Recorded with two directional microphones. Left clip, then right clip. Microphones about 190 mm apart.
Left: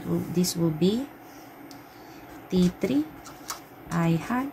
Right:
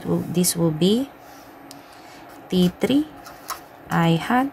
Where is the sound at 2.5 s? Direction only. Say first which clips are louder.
Right 5 dB; 40° right (ahead or behind).